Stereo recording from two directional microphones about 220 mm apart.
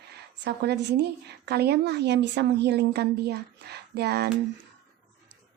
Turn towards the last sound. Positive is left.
turn(degrees=-45)  # may be behind; listen again after turning